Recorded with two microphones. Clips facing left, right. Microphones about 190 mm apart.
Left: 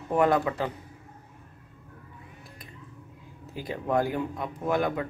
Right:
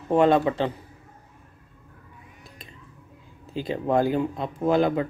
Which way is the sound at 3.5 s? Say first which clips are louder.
Right 4 dB; 25° right (ahead or behind).